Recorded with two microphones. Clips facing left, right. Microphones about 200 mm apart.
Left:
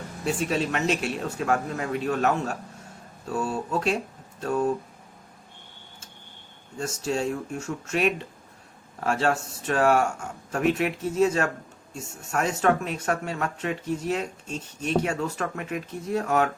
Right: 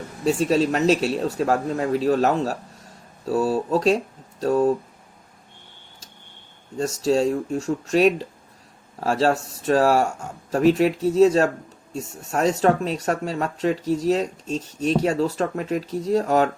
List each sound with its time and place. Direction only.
0.3 s speech: 35° right (ahead or behind)
6.7 s speech: 35° right (ahead or behind)